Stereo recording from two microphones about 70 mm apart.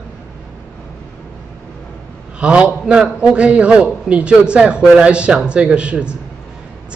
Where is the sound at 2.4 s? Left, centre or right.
Centre.